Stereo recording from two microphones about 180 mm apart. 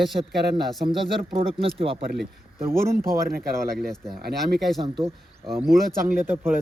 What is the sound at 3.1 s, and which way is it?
Speech, 55° right (ahead or behind).